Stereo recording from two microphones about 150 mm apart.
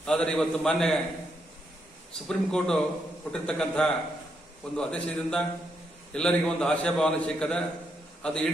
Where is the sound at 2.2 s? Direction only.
5° left (ahead or behind).